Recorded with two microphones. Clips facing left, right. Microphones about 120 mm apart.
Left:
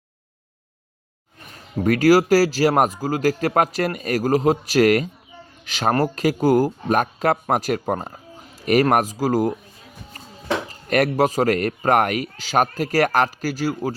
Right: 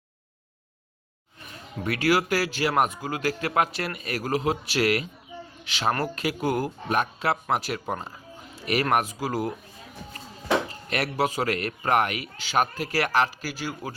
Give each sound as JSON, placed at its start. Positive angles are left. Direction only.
{"t": 1.8, "sound": "speech", "side_deg": 40}
{"t": 10.8, "sound": "a man's voice", "side_deg": 45}